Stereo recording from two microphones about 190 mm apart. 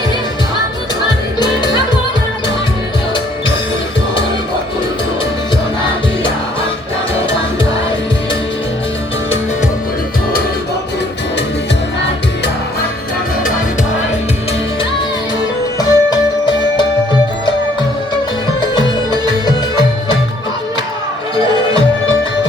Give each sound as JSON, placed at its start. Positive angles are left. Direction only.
{"t": 15.8, "sound": "music", "side_deg": 20}
{"t": 19.5, "sound": "music", "side_deg": 20}